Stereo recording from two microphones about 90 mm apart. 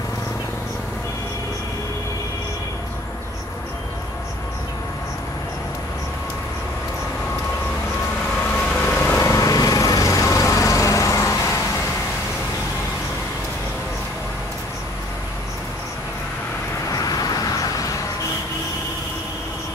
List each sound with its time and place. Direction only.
8.5 s vehicle: 10° left (ahead or behind)
8.8 s vehicle: 20° left (ahead or behind)
9.2 s lawn mower: 40° left (ahead or behind)
16.9 s vehicle: 45° left (ahead or behind)